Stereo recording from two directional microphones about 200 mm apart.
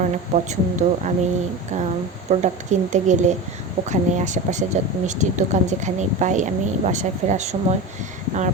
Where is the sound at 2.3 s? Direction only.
40° right (ahead or behind).